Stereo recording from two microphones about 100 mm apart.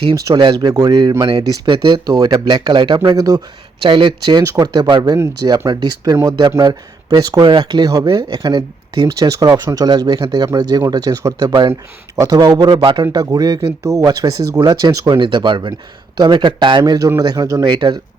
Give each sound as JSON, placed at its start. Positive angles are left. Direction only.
{"t": 0.3, "sound": "speech", "side_deg": -50}
{"t": 3.8, "sound": "speech", "side_deg": -55}
{"t": 4.4, "sound": "speech", "side_deg": -35}
{"t": 7.4, "sound": "speech", "side_deg": -50}
{"t": 12.7, "sound": "speech", "side_deg": -65}
{"t": 13.3, "sound": "speech", "side_deg": -45}
{"t": 14.9, "sound": "speech", "side_deg": -35}
{"t": 15.2, "sound": "speech", "side_deg": -50}
{"t": 16.8, "sound": "speech", "side_deg": -40}
{"t": 17.7, "sound": "speech", "side_deg": -45}